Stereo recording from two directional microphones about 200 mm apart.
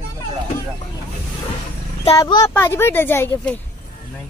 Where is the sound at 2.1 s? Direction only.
20° left (ahead or behind).